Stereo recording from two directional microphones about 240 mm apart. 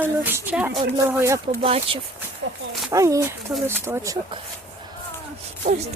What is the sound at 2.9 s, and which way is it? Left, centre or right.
Speech, centre.